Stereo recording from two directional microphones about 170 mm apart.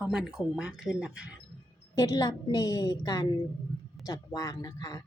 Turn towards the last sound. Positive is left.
turn(degrees=20)  # may be behind; listen again after turning